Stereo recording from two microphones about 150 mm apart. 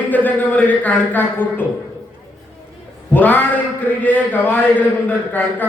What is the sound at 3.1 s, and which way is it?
A man's voice, 10° left (ahead or behind).